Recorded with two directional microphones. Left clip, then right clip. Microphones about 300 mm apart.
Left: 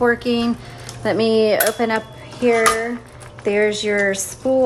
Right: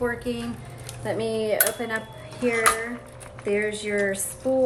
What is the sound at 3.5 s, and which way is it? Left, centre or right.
Speech, centre.